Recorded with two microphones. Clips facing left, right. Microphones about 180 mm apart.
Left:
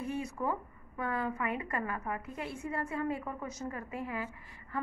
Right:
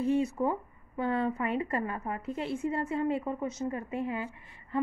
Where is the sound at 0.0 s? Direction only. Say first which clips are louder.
Right 8 dB; 25° right (ahead or behind).